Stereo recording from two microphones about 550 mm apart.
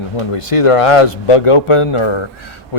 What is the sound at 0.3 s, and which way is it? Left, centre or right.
Speech, left.